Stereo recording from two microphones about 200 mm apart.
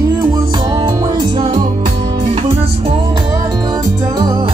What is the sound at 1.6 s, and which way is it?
Music, 35° right (ahead or behind).